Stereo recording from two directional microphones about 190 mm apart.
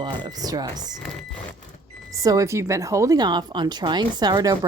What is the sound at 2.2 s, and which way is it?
Speech, 15° right (ahead or behind).